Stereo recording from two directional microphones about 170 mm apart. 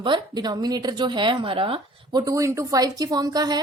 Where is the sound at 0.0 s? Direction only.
25° right (ahead or behind).